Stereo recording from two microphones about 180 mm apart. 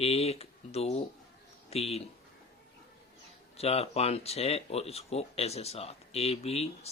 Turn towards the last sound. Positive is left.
turn(degrees=35)  # may be behind; listen again after turning